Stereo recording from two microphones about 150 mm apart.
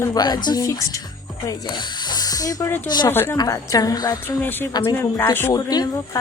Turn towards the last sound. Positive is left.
turn(degrees=25)  # may be behind; listen again after turning